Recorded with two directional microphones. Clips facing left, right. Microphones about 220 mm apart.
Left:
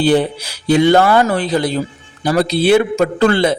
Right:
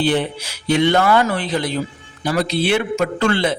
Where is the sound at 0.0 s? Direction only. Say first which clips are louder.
Left 5 dB; 35° left (ahead or behind).